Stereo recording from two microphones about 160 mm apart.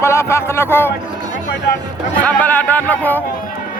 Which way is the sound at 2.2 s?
10° left (ahead or behind).